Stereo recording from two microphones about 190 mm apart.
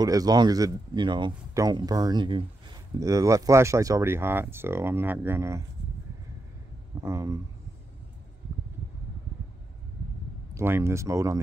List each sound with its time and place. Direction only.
0.0 s speech: 20° right (ahead or behind)
7.0 s speech: 15° right (ahead or behind)
10.5 s speech: 15° right (ahead or behind)